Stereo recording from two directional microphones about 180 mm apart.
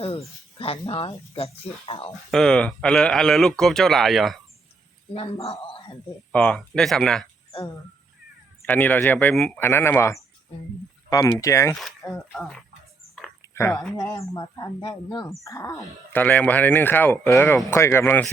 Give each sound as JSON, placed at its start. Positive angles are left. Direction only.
{"t": 0.6, "sound": "speech", "side_deg": 30}
{"t": 2.3, "sound": "speech", "side_deg": 5}
{"t": 5.1, "sound": "speech", "side_deg": 35}
{"t": 6.3, "sound": "speech", "side_deg": 5}
{"t": 8.6, "sound": "speech", "side_deg": 10}
{"t": 11.7, "sound": "speech", "side_deg": 0}
{"t": 13.5, "sound": "speech", "side_deg": 15}